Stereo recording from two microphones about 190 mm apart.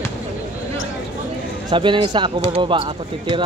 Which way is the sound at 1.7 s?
25° right (ahead or behind).